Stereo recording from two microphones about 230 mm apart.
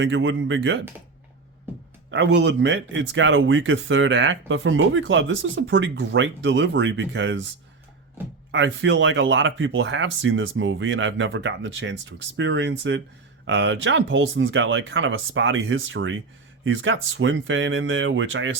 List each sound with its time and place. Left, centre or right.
0.0 s speech: right
2.0 s speech: right
8.2 s speech: centre
8.5 s speech: right